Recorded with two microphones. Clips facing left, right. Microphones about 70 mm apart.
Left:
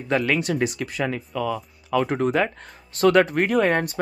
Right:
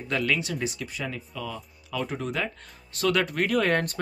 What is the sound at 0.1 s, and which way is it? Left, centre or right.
Speech, left.